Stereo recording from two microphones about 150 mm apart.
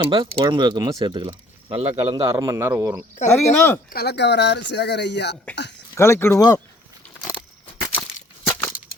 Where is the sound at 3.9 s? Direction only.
90° left.